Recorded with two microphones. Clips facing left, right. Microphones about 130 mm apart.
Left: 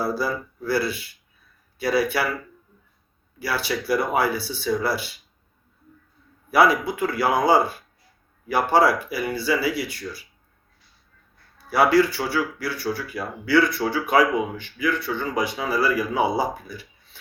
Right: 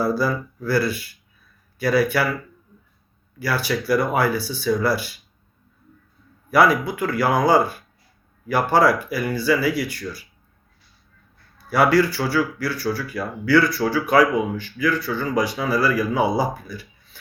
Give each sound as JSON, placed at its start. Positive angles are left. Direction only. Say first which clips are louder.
{"t": 0.0, "sound": "speech", "louder": "right 4 dB", "side_deg": 25}
{"t": 3.3, "sound": "speech", "louder": "right 3 dB", "side_deg": 25}
{"t": 6.5, "sound": "speech", "louder": "right 1 dB", "side_deg": 25}
{"t": 11.5, "sound": "speech", "louder": "right 1 dB", "side_deg": 25}